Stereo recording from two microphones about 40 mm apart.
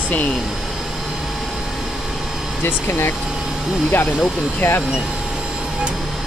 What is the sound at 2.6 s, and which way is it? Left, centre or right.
Speech, left.